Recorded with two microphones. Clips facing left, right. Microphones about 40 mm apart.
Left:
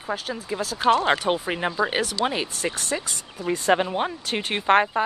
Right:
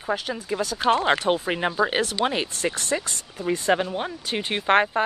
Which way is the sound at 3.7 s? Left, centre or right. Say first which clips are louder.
Left 2 dB; centre.